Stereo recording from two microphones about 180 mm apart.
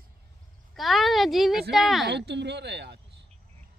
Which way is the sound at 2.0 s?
70° right (ahead or behind).